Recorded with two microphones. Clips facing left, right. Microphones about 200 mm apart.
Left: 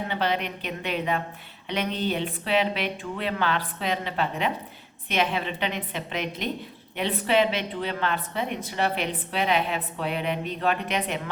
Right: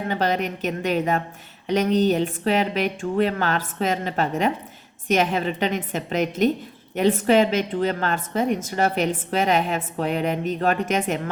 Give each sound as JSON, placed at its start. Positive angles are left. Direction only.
{"t": 0.1, "sound": "a woman's voice", "side_deg": -45}